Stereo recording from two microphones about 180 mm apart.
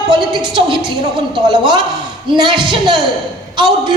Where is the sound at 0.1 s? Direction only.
25° right (ahead or behind).